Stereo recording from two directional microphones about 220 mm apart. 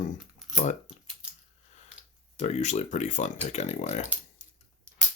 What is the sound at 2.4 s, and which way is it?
Speech, 30° left (ahead or behind).